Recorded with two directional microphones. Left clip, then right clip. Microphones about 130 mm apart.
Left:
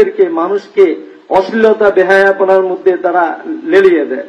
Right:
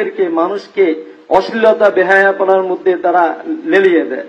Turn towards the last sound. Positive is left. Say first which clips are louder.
# left 2 dB
turn(degrees=-40)  # may be behind; listen again after turning